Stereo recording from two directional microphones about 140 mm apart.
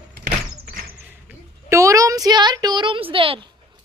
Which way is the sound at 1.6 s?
20° right (ahead or behind).